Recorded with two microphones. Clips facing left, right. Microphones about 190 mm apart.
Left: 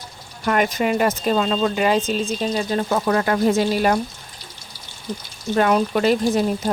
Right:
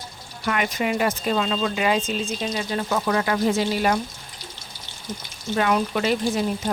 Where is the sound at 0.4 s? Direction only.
45° left (ahead or behind).